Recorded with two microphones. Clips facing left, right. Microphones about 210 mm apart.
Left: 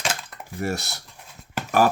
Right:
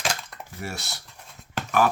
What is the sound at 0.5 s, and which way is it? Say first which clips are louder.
Speech: left 8 dB; 45° left (ahead or behind).